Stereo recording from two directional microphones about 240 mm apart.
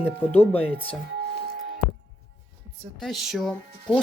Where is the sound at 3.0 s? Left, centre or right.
Centre.